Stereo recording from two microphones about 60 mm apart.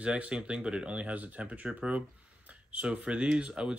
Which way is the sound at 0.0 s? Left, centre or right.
Centre.